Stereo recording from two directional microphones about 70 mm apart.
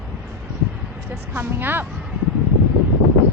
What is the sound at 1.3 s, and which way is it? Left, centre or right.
Speech, right.